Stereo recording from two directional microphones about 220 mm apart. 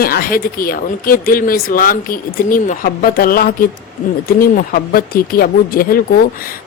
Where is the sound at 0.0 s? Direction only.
40° left (ahead or behind).